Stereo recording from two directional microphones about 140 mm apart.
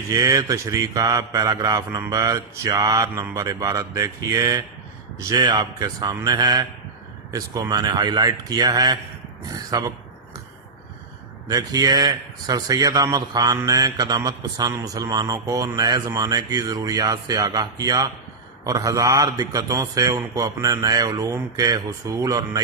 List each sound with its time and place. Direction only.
0.1 s speech: 25° right (ahead or behind)
11.4 s speech: 25° right (ahead or behind)